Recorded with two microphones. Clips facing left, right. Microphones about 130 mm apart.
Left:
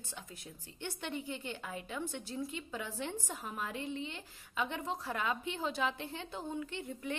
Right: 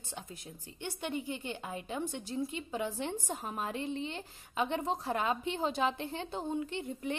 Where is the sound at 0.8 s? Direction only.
15° right (ahead or behind).